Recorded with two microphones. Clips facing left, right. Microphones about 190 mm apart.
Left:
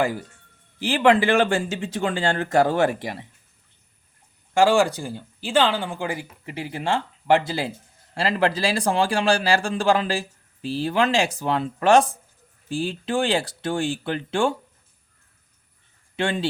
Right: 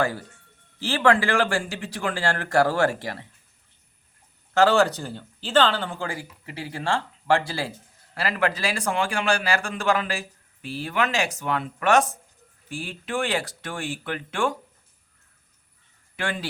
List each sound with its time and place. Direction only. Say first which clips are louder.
0.0 s speech: left 2 dB; 15° left (ahead or behind)
4.5 s a man's voice: left 1 dB; 10° left (ahead or behind); by 14.5 s 30° left (ahead or behind)
16.1 s speech: left 6 dB; 25° left (ahead or behind)